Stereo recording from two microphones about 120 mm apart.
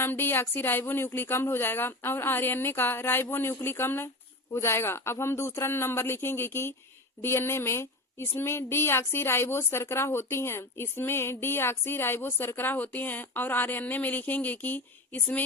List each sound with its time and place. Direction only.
0.0 s a woman's voice: 20° left (ahead or behind)